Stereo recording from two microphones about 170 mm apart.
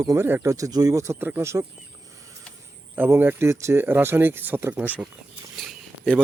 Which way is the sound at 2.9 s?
15° right (ahead or behind).